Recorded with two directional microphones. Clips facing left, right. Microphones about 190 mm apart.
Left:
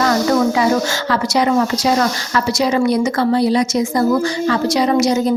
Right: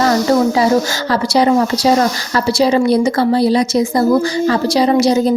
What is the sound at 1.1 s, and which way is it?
A woman's voice, 35° right (ahead or behind).